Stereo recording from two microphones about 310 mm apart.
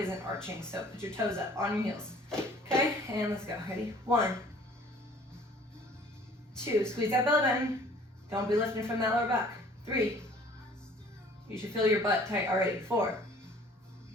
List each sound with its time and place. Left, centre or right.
0.0 s speech: centre
6.6 s a woman's voice: centre
11.6 s speech: centre